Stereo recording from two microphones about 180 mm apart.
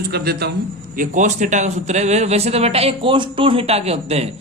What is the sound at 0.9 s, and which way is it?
A man's voice, 45° right (ahead or behind).